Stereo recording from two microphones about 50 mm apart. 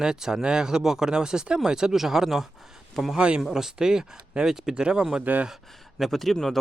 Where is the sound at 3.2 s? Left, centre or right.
Right.